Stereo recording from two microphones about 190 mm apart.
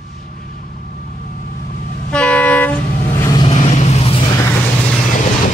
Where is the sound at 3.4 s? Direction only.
35° left (ahead or behind).